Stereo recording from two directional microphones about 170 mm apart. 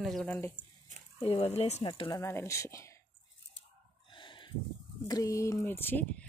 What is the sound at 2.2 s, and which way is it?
Speech, 15° left (ahead or behind).